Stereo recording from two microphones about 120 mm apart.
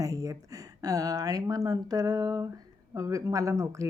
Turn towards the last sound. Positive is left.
turn(degrees=-30)  # may be behind; listen again after turning